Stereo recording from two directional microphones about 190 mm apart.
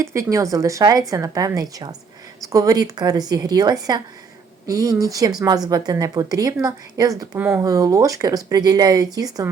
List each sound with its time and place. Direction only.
0.0 s a woman's voice: 15° right (ahead or behind)